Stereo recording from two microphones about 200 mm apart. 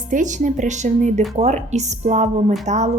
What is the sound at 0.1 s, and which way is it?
A woman's voice, 40° right (ahead or behind).